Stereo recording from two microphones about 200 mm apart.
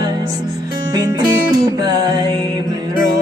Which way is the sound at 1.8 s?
20° right (ahead or behind).